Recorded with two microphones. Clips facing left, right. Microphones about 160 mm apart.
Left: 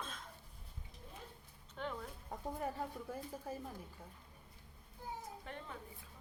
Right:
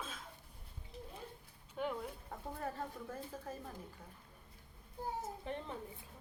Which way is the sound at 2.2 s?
15° left (ahead or behind).